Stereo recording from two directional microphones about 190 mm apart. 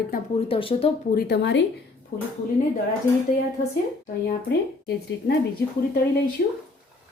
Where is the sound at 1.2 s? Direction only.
65° left (ahead or behind).